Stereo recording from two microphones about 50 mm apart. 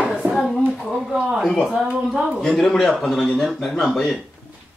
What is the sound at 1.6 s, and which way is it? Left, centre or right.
Speech, centre.